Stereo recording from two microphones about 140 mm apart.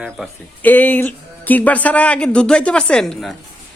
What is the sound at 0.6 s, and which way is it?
Speech, 10° left (ahead or behind).